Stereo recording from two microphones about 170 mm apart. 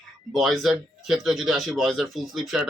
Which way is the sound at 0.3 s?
Centre (ahead or behind).